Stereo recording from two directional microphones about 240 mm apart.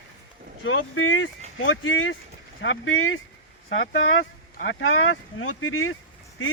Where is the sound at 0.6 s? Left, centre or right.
Left.